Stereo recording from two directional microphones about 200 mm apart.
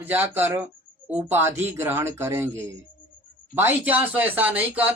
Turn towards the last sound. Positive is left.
turn(degrees=-10)  # may be behind; listen again after turning